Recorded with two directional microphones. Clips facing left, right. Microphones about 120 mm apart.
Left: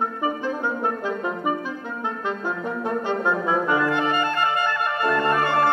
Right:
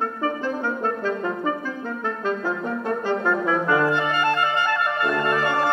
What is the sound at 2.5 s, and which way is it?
Brass instrument, 15° left (ahead or behind).